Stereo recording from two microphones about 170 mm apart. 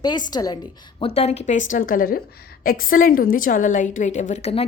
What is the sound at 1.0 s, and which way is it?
A woman's voice, 35° left (ahead or behind).